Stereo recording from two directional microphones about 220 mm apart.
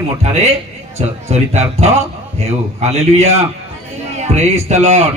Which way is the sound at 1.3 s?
30° right (ahead or behind).